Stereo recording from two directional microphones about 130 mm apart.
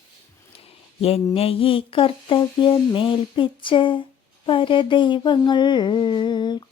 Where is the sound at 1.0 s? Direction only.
50° left (ahead or behind).